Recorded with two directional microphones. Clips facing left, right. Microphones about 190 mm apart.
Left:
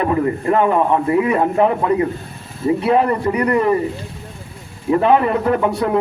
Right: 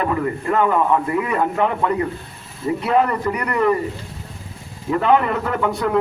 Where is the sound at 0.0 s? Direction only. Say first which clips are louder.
Left 4 dB; 30° left (ahead or behind).